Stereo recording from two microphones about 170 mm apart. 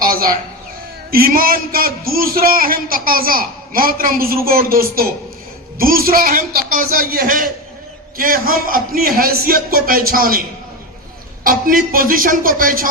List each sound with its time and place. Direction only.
0.0 s a sound: 60° right (ahead or behind)
1.1 s a man's voice: 60° right (ahead or behind)
11.4 s a man's voice: 55° right (ahead or behind)